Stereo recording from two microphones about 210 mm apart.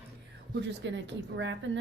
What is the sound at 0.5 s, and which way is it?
Speech, 55° right (ahead or behind).